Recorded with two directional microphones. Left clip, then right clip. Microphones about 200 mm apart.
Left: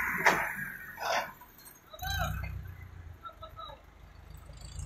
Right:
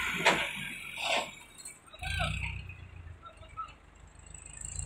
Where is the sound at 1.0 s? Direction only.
25° right (ahead or behind).